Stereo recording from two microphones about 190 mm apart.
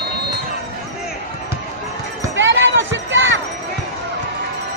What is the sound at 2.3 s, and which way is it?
Basketball bounce, 75° right (ahead or behind).